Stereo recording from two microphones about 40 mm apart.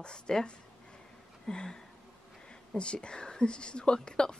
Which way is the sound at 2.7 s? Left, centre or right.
Left.